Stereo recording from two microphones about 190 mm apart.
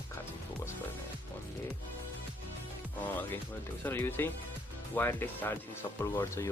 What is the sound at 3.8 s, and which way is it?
Speech, 10° left (ahead or behind).